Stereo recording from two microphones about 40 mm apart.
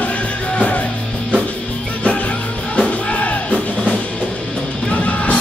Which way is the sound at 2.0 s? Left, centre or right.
Left.